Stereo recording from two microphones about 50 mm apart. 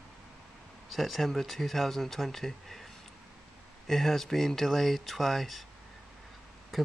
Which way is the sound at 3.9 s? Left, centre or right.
Centre.